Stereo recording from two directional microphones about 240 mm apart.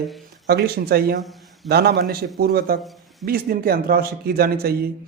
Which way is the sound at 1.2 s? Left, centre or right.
Centre.